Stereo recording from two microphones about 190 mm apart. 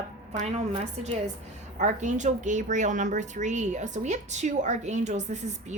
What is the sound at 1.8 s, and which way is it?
A woman's voice, 40° right (ahead or behind).